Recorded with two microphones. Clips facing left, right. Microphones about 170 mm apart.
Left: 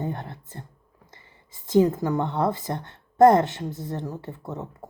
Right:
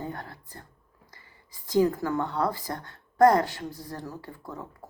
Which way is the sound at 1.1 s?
20° left (ahead or behind).